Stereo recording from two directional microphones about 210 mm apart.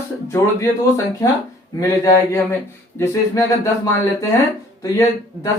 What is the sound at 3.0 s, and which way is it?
Speech, 15° left (ahead or behind).